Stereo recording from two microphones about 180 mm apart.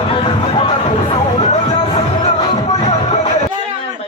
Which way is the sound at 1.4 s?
35° left (ahead or behind).